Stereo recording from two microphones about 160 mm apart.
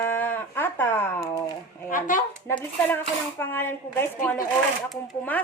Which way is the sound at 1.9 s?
55° left (ahead or behind).